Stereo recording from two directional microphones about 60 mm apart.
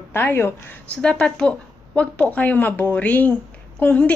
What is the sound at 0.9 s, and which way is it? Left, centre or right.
A woman's voice, centre.